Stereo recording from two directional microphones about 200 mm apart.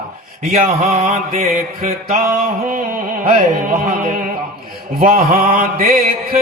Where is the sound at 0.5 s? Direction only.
45° right (ahead or behind).